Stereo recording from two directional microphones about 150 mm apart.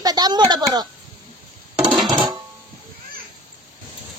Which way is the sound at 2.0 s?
25° right (ahead or behind).